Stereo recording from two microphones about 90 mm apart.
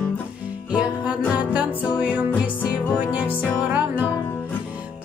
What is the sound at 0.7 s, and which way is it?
Music, 10° right (ahead or behind).